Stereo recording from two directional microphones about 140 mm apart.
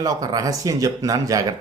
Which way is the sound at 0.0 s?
25° right (ahead or behind).